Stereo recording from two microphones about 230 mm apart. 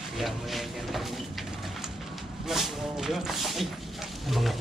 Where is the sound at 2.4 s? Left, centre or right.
Centre.